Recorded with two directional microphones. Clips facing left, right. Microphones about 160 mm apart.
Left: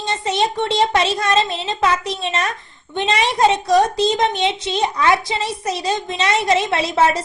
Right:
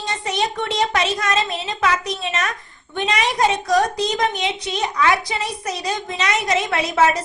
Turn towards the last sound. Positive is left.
turn(degrees=30)  # may be behind; listen again after turning